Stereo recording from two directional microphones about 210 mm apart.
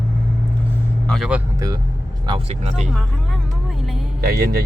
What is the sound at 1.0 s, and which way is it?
Speech, centre (ahead or behind).